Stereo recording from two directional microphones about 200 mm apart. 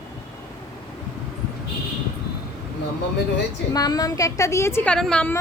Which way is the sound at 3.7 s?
20° left (ahead or behind).